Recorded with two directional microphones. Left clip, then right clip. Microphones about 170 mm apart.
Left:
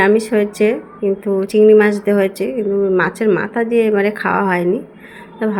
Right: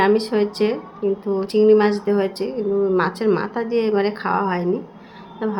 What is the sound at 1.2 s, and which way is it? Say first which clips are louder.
Speech: left 5 dB; 25° left (ahead or behind).